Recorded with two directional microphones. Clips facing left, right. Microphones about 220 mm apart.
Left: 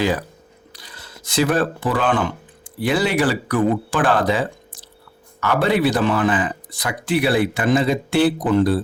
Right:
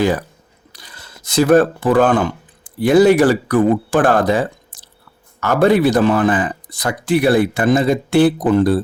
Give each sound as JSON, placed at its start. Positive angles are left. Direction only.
{"t": 0.0, "sound": "speech", "side_deg": -50}